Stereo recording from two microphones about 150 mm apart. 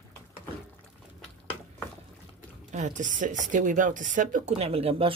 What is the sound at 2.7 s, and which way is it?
Speech, 55° right (ahead or behind).